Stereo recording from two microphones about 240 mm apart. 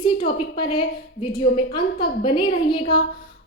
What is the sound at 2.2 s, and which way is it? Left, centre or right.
Speech, centre.